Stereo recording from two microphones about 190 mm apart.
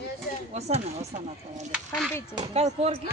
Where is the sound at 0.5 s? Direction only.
35° right (ahead or behind).